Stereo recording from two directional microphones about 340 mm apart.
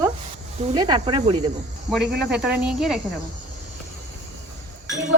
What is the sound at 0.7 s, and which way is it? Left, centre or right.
Speech, centre.